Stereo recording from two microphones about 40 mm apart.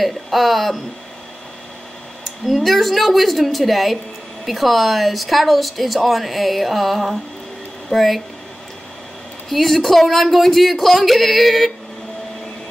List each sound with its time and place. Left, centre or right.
0.0 s speech: centre
2.5 s speech: centre
9.5 s speech: centre